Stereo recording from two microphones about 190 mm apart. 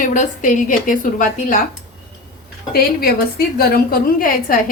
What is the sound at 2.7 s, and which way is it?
A woman's voice, 50° left (ahead or behind).